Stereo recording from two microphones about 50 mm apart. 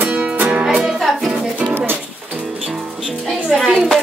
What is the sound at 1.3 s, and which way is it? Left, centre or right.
Music, right.